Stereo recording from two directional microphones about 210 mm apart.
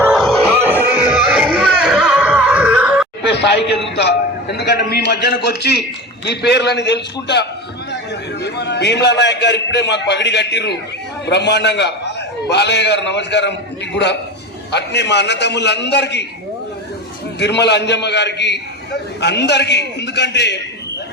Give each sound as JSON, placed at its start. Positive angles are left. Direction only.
{"t": 0.0, "sound": "music", "side_deg": 0}
{"t": 0.5, "sound": "music", "side_deg": -10}
{"t": 3.2, "sound": "a man's voice", "side_deg": 55}
{"t": 8.4, "sound": "a man's voice", "side_deg": 55}
{"t": 17.4, "sound": "a man's voice", "side_deg": 55}